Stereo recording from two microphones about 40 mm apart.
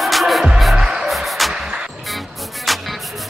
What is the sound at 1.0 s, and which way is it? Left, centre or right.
Music, centre.